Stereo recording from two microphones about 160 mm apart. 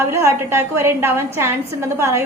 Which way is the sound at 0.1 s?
15° right (ahead or behind).